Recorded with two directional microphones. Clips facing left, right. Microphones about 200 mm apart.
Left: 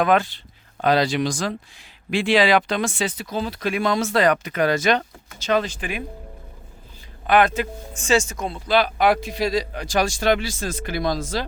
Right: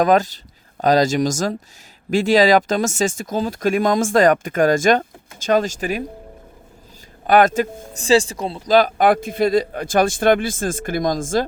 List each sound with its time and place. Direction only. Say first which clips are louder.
0.0 s speech: right 3 dB; 40° right (ahead or behind)
7.3 s speech: right 4 dB; 45° right (ahead or behind)